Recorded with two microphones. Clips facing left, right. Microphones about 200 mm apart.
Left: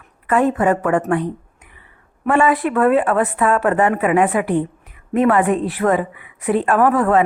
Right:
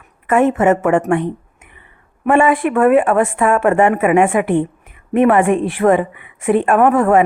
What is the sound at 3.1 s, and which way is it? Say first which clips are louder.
A woman's voice: right 3 dB; 25° right (ahead or behind).